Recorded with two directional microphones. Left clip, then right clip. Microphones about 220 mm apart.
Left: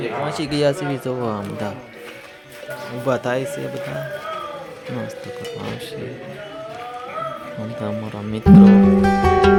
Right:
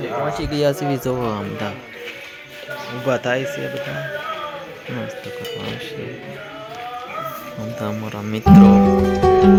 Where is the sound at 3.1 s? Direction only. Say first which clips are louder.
Right 1 dB; centre (ahead or behind).